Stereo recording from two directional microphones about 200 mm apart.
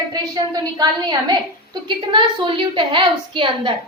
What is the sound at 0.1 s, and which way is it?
A woman's voice, 20° right (ahead or behind).